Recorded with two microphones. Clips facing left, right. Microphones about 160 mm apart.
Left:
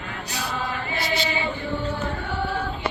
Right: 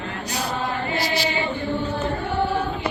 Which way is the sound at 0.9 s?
35° right (ahead or behind).